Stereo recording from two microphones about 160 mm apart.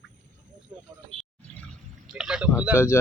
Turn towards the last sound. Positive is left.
turn(degrees=15)  # may be behind; listen again after turning